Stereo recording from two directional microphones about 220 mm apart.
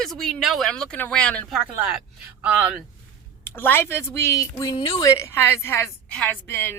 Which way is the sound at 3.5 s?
10° left (ahead or behind).